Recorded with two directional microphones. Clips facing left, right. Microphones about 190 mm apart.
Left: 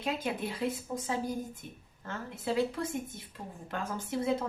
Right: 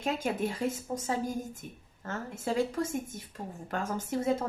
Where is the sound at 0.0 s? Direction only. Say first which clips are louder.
Right 3 dB; 45° right (ahead or behind).